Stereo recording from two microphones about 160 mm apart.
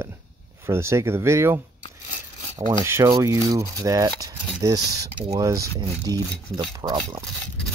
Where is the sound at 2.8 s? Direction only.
15° right (ahead or behind).